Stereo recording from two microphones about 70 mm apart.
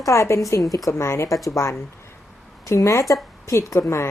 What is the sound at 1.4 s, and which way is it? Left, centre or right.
Speech, left.